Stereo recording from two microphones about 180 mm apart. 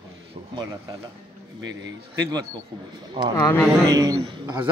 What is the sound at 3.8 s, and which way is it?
Speech, 20° right (ahead or behind).